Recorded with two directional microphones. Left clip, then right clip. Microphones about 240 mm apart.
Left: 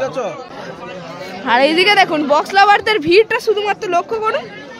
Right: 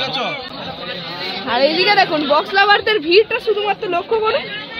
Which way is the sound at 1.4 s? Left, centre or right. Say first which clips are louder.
Left 3 dB; left.